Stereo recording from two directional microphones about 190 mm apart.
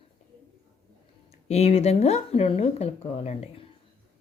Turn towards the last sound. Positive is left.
turn(degrees=35)  # may be behind; listen again after turning